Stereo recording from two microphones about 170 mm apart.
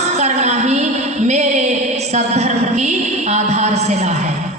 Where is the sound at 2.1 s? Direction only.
40° right (ahead or behind).